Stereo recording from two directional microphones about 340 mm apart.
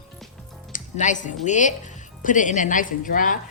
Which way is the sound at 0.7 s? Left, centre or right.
Left.